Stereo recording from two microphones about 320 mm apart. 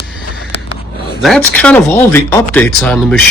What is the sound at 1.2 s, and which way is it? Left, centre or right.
Speech, centre.